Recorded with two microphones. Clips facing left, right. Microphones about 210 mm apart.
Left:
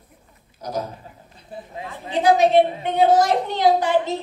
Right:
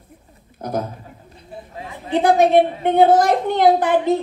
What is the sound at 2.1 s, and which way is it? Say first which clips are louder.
A woman's voice: right 2 dB; 55° right (ahead or behind).